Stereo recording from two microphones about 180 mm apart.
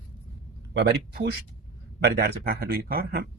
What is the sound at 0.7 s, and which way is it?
Speech, 65° right (ahead or behind).